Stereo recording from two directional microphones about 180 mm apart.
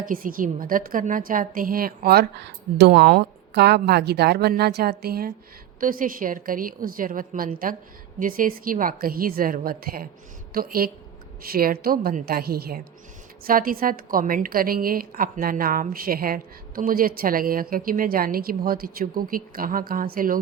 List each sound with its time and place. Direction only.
0.0 s a woman's voice: 50° right (ahead or behind)